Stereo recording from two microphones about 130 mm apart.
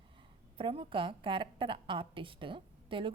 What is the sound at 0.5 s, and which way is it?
A woman's voice, 45° right (ahead or behind).